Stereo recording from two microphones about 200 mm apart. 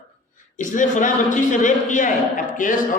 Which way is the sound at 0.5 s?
40° left (ahead or behind).